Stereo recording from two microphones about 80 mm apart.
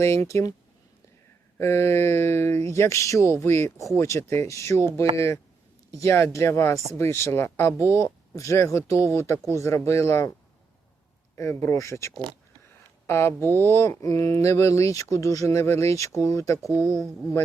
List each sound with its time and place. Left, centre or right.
0.0 s speech: left
1.5 s speech: left
11.3 s speech: left